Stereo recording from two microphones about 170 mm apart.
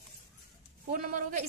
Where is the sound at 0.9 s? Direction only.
55° right (ahead or behind).